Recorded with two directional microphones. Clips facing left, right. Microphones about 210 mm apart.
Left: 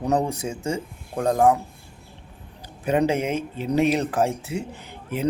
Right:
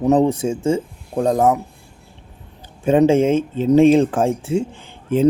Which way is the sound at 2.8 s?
25° right (ahead or behind).